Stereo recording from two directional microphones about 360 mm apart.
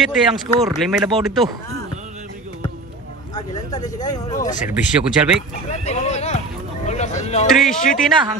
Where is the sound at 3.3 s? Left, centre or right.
Centre.